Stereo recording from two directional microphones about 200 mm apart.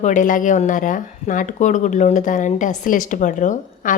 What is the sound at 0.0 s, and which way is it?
Speech, 40° left (ahead or behind).